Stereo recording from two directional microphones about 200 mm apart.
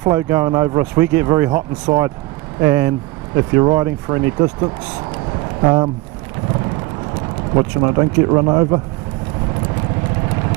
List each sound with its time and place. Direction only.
0.1 s speech: 15° right (ahead or behind)
7.5 s speech: 20° right (ahead or behind)